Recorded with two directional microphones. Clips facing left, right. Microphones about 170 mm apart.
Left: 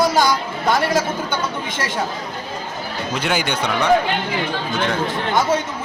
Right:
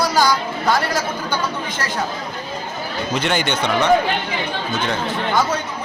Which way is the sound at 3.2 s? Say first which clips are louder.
Right 1 dB; 5° left (ahead or behind).